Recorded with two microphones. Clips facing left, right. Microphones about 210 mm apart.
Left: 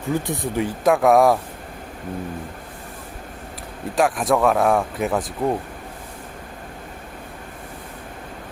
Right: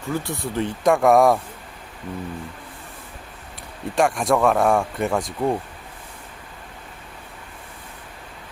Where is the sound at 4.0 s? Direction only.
Centre (ahead or behind).